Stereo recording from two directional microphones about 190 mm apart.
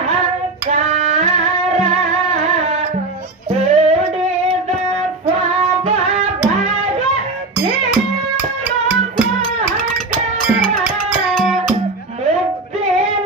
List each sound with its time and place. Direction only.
0.7 s music: 35° right (ahead or behind)
3.6 s music: 35° right (ahead or behind)